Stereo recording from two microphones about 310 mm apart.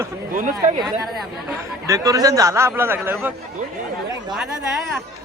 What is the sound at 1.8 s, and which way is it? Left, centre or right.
A man's voice, centre.